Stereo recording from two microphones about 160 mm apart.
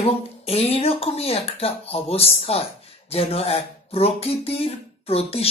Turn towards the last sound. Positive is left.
turn(degrees=40)  # may be behind; listen again after turning